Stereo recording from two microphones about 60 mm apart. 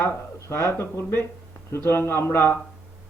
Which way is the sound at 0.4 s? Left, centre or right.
Left.